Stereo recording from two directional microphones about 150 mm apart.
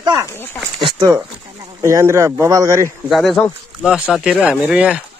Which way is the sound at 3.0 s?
Centre (ahead or behind).